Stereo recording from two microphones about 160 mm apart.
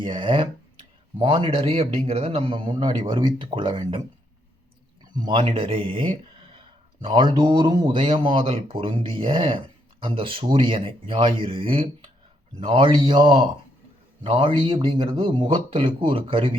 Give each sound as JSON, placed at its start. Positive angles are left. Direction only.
{"t": 0.0, "sound": "speech", "side_deg": -30}
{"t": 5.1, "sound": "speech", "side_deg": -30}